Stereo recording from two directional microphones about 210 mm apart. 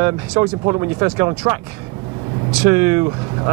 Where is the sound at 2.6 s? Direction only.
10° right (ahead or behind).